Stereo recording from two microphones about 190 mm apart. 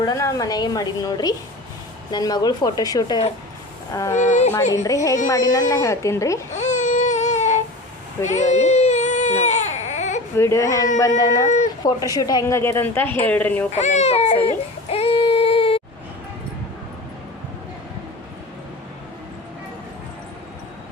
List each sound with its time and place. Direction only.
0.0 s a woman's voice: 15° left (ahead or behind)
4.2 s speech: 40° left (ahead or behind)
4.7 s a woman's voice: 15° left (ahead or behind)
6.5 s baby cry: 40° left (ahead or behind)
10.3 s a woman's voice: 15° left (ahead or behind)
11.4 s a sound: 40° left (ahead or behind)
12.1 s a woman's voice: 20° left (ahead or behind)
13.7 s baby cry: 35° left (ahead or behind)